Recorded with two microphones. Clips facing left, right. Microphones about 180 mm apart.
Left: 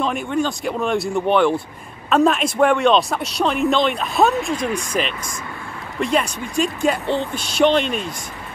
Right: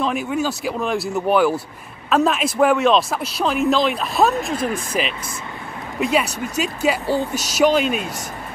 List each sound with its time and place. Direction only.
0.0 s speech: 5° right (ahead or behind)